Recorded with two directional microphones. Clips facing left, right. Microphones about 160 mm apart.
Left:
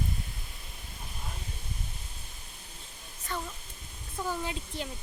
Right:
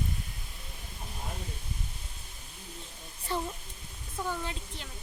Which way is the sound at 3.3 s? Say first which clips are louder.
Right 4 dB; 30° right (ahead or behind).